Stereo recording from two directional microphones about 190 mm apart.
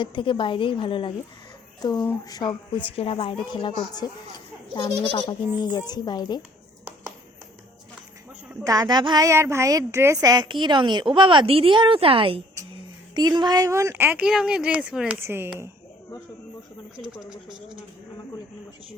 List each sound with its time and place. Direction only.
0.0 s a woman's voice: 25° left (ahead or behind)
5.1 s a woman's voice: 25° left (ahead or behind)
8.6 s speech: 20° right (ahead or behind)